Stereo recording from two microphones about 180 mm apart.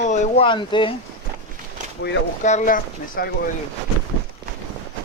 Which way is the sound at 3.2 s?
55° left (ahead or behind).